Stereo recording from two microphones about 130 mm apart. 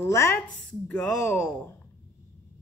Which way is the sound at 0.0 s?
20° left (ahead or behind).